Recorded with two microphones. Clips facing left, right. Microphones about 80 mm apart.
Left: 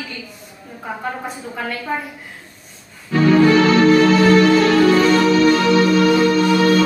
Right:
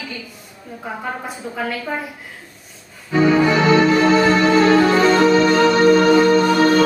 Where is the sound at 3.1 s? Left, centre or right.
Centre.